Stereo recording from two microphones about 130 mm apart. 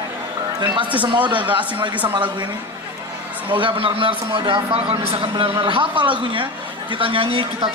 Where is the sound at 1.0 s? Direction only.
40° right (ahead or behind).